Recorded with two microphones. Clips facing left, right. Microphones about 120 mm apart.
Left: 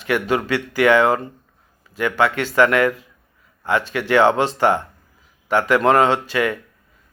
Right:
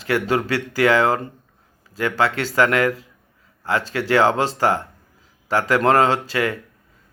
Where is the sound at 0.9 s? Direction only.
20° left (ahead or behind).